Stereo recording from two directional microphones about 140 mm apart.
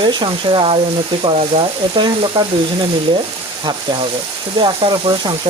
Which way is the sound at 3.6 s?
35° right (ahead or behind).